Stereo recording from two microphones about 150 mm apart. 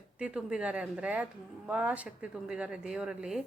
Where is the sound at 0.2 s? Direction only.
5° right (ahead or behind).